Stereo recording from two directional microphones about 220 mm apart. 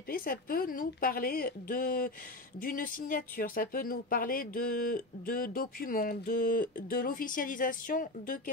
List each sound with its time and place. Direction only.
0.1 s speech: 40° left (ahead or behind)